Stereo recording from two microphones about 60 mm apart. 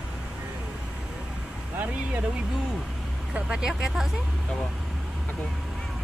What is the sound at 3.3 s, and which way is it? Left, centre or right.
Speech, centre.